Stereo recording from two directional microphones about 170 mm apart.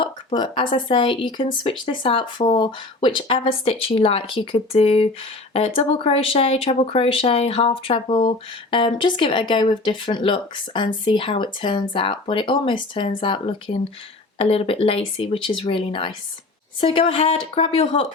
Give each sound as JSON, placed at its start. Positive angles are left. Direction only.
{"t": 0.0, "sound": "speech", "side_deg": 30}